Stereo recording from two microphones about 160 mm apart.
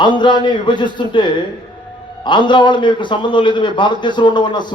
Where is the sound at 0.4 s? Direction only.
30° left (ahead or behind).